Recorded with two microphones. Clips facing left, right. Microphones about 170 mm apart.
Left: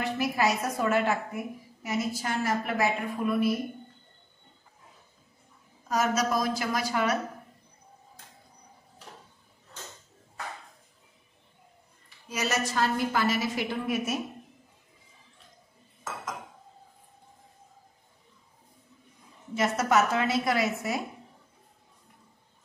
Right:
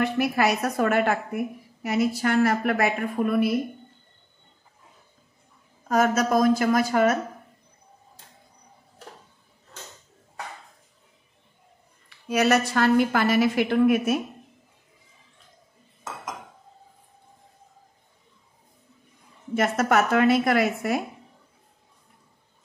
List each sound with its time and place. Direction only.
0.0 s a woman's voice: 65° right (ahead or behind)
5.9 s a woman's voice: 55° right (ahead or behind)
12.3 s a woman's voice: 65° right (ahead or behind)
19.5 s a woman's voice: 55° right (ahead or behind)